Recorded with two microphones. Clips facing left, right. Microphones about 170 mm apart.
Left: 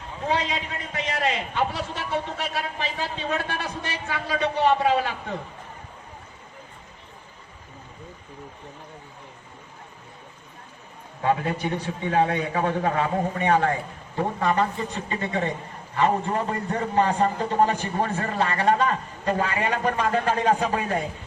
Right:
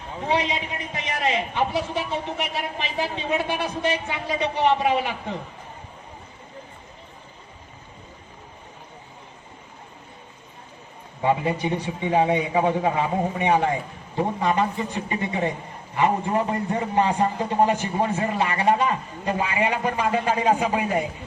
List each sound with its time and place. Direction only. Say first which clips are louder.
0.3 s a man's voice: right 2 dB; 15° right (ahead or behind)
11.2 s a man's voice: right 2 dB; 15° right (ahead or behind)